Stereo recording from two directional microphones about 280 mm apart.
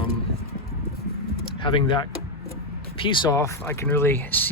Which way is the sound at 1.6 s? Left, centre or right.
Centre.